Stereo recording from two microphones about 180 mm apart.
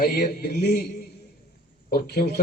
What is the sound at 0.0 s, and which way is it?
Speech, 60° left (ahead or behind).